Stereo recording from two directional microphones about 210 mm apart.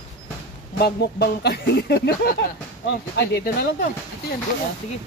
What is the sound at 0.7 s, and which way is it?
Speech, 50° left (ahead or behind).